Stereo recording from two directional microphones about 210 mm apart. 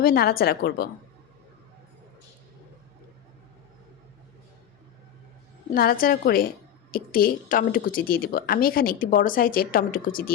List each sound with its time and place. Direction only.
0.0 s a woman's voice: 45° left (ahead or behind)
5.7 s a woman's voice: 45° left (ahead or behind)